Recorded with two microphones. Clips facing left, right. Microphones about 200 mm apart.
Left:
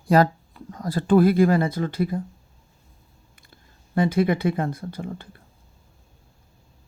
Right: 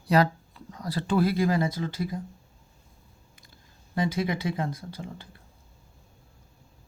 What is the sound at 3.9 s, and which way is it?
Speech, 55° left (ahead or behind).